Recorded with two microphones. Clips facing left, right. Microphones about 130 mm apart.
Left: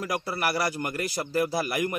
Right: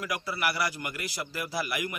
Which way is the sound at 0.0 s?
40° left (ahead or behind).